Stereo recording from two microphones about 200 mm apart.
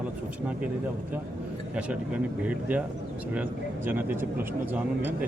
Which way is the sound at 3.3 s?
10° right (ahead or behind).